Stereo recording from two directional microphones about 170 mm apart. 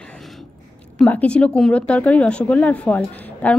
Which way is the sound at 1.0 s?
10° left (ahead or behind).